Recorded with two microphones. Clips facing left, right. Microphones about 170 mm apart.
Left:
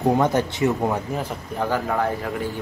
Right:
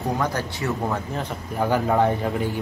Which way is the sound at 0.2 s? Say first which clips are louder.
Left 6 dB; 20° left (ahead or behind).